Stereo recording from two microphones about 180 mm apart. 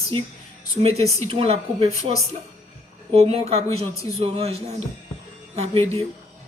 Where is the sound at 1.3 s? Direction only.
30° right (ahead or behind).